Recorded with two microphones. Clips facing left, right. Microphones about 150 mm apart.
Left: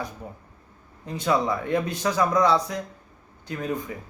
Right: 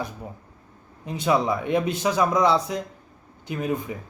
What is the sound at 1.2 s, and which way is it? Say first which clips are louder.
Speech: right 2 dB; 15° right (ahead or behind).